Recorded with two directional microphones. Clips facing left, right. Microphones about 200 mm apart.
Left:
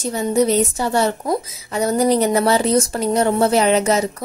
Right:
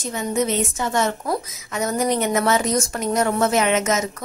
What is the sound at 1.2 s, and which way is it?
A woman's voice, 25° left (ahead or behind).